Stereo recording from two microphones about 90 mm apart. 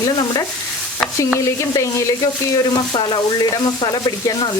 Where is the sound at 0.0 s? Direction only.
50° left (ahead or behind).